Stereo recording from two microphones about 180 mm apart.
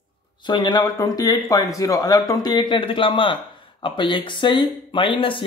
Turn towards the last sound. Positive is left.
turn(degrees=30)  # may be behind; listen again after turning